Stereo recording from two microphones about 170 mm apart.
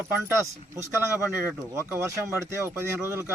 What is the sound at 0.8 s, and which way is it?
Speech, 10° right (ahead or behind).